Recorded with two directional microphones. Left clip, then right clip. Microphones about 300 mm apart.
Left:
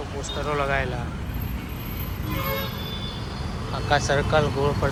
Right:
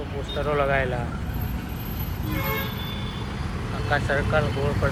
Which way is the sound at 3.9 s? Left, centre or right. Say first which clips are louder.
Left 2 dB; centre.